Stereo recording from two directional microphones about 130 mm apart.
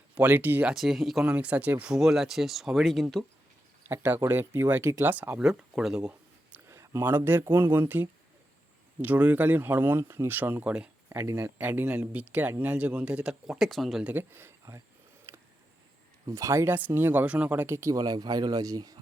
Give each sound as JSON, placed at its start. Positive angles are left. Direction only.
{"t": 0.1, "sound": "speech", "side_deg": -15}
{"t": 0.7, "sound": "speech", "side_deg": 0}
{"t": 3.8, "sound": "speech", "side_deg": -15}
{"t": 6.7, "sound": "speech", "side_deg": -20}
{"t": 11.2, "sound": "speech", "side_deg": -20}
{"t": 14.1, "sound": "speech", "side_deg": -15}
{"t": 16.2, "sound": "speech", "side_deg": -25}